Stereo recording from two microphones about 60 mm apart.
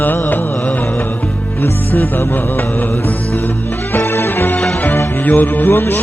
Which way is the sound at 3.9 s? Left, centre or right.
Left.